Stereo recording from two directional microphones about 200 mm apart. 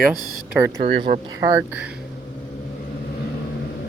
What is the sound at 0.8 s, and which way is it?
Speech, 25° right (ahead or behind).